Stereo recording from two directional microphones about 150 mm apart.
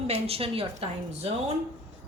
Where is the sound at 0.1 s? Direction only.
40° right (ahead or behind).